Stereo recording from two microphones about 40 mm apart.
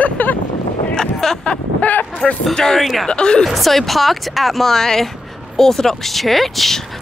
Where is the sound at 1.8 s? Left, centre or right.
Left.